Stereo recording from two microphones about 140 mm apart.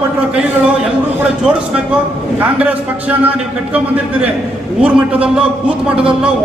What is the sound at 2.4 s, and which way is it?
Speech, 10° right (ahead or behind).